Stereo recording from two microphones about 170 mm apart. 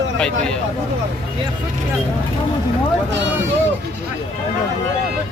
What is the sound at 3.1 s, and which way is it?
Speech, 90° right.